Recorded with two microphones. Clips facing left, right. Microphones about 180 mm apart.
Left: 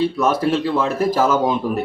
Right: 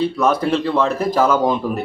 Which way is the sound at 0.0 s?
5° left (ahead or behind).